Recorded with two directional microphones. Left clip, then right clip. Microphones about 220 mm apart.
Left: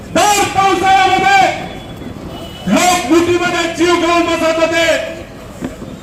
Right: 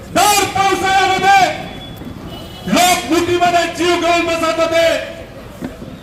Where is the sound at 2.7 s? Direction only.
15° right (ahead or behind).